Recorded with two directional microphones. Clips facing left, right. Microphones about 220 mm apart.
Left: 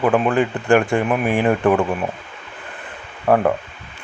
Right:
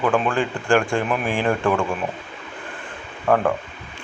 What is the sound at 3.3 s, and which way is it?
Speech, 20° left (ahead or behind).